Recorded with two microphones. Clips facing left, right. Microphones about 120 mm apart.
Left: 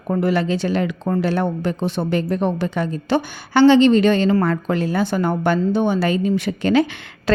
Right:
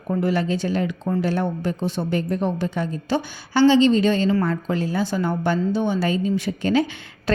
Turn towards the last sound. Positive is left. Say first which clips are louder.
# left 3 dB
turn(degrees=75)  # may be behind; listen again after turning